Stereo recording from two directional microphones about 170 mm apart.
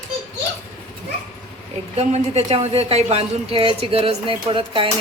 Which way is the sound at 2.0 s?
40° right (ahead or behind).